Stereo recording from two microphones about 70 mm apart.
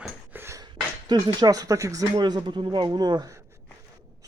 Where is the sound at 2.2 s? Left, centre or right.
Right.